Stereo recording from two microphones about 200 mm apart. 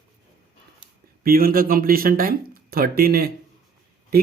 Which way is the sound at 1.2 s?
45° right (ahead or behind).